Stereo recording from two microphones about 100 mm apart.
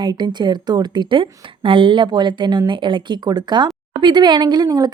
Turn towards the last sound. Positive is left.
turn(degrees=-40)  # may be behind; listen again after turning